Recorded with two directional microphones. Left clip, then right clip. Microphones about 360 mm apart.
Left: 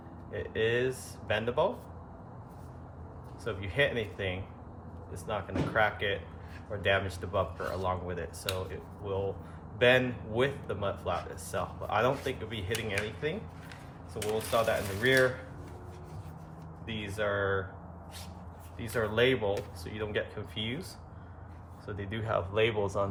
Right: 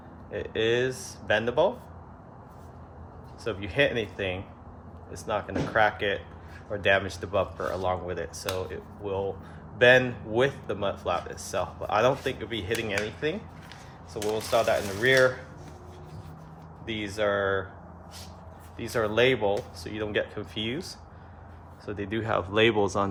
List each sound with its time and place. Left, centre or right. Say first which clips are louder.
0.3 s a man's voice: right 4 dB; right
3.4 s a man's voice: right 4 dB; right
9.7 s a man's voice: right 6 dB; right
16.8 s a man's voice: right 6 dB; right
18.8 s a man's voice: right 4 dB; right